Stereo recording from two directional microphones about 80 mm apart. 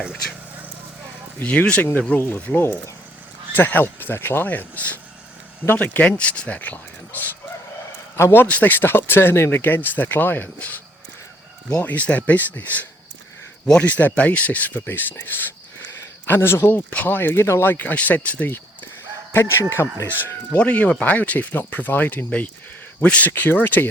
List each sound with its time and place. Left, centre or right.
1.4 s speech: centre
11.8 s speech: centre; by 20.1 s left
20.1 s speech: left